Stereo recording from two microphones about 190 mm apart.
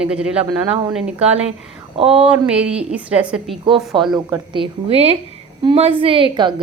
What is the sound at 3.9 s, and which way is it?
A woman's voice, 25° right (ahead or behind).